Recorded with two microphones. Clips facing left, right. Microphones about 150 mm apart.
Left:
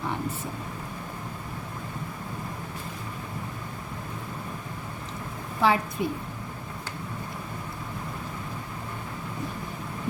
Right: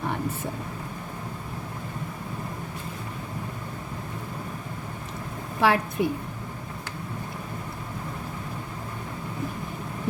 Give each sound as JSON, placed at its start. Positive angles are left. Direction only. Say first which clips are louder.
{"t": 5.5, "sound": "a woman's voice", "louder": "right 1 dB", "side_deg": -75}